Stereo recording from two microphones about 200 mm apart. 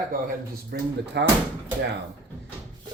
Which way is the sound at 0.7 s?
50° right (ahead or behind).